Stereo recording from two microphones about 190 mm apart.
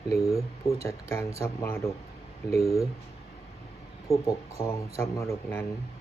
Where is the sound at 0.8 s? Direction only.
15° left (ahead or behind).